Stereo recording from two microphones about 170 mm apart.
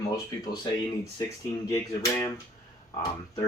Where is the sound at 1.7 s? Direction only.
20° left (ahead or behind).